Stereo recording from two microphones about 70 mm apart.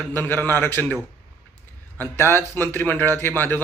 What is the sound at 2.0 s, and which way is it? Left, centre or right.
A man's voice, left.